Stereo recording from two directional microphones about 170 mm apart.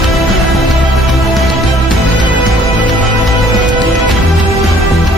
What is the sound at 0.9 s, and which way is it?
Music, centre (ahead or behind).